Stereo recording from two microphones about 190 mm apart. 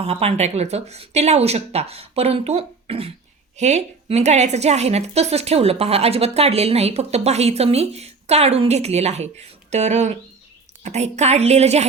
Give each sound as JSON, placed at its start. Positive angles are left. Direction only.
{"t": 0.0, "sound": "a woman's voice", "side_deg": -35}